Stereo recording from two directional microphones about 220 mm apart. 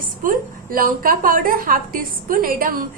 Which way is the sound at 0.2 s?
40° right (ahead or behind).